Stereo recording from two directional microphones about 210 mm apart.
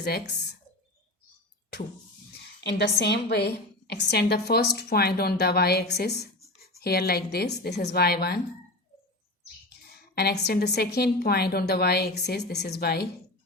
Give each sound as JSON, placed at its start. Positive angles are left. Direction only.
{"t": 2.4, "sound": "a woman's voice", "side_deg": 55}
{"t": 10.2, "sound": "a woman's voice", "side_deg": 50}